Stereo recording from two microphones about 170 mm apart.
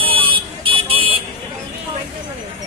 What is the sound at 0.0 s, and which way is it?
Vehicle, 30° right (ahead or behind).